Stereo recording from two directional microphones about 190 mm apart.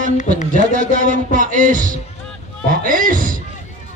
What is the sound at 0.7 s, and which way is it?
Speech, 40° right (ahead or behind).